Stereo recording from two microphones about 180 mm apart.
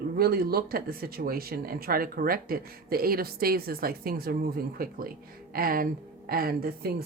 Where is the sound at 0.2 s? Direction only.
55° right (ahead or behind).